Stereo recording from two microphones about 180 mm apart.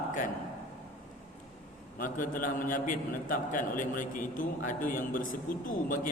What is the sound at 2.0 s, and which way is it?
A man's voice, 50° left (ahead or behind).